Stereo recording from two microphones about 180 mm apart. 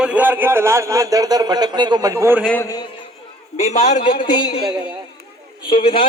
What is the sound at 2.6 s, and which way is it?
Speech, 20° left (ahead or behind).